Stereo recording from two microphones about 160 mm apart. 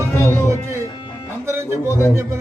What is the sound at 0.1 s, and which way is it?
Music, 15° left (ahead or behind).